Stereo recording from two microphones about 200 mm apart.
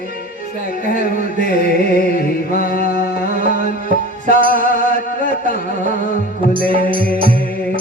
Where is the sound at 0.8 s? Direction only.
45° left (ahead or behind).